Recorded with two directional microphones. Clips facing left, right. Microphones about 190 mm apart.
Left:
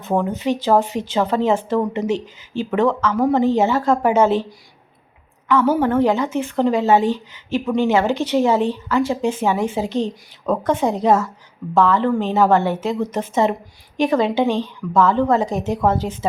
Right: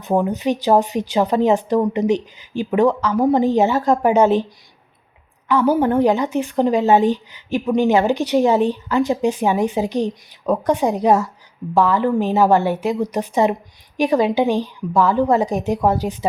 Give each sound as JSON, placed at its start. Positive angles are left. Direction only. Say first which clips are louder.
{"t": 0.0, "sound": "a woman's voice", "louder": "right 2 dB", "side_deg": -15}
{"t": 5.5, "sound": "a woman's voice", "louder": "right 1 dB", "side_deg": -15}